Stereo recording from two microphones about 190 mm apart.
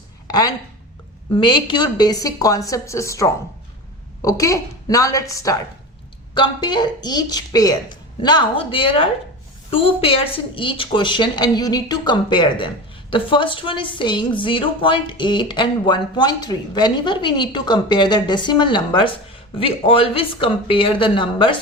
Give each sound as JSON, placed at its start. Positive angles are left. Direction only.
{"t": 0.3, "sound": "a woman's voice", "side_deg": 20}